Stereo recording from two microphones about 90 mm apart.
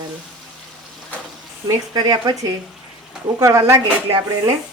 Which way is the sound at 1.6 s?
45° right (ahead or behind).